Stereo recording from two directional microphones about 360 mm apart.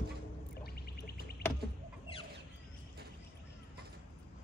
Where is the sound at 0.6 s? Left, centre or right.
Left.